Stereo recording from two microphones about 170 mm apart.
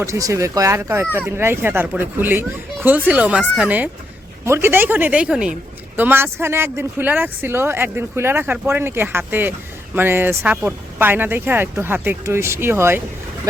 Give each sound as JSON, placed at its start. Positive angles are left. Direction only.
{"t": 0.0, "sound": "speech", "side_deg": -20}